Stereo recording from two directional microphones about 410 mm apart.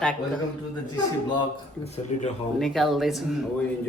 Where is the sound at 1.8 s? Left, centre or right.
Centre.